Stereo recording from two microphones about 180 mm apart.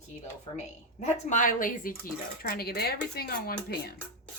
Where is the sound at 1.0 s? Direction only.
45° left (ahead or behind).